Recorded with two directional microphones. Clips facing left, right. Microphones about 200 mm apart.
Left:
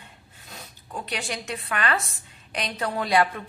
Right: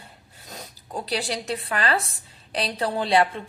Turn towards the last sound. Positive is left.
turn(degrees=-30)  # may be behind; listen again after turning